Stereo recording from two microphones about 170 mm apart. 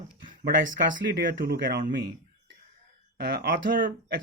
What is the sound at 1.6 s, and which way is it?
Speech, 55° right (ahead or behind).